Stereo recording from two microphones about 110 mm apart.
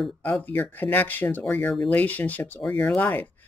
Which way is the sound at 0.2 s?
15° left (ahead or behind).